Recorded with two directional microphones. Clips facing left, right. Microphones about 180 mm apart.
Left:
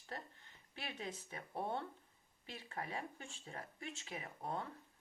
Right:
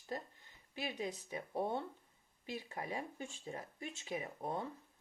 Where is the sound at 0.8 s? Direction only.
10° right (ahead or behind).